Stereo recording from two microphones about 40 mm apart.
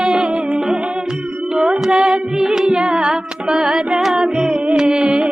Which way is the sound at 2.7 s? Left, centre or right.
Right.